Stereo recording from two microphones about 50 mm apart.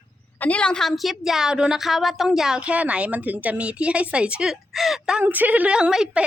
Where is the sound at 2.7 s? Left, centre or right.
Right.